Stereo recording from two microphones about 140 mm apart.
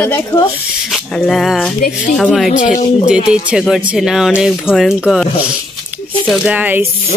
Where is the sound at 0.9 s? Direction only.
5° left (ahead or behind).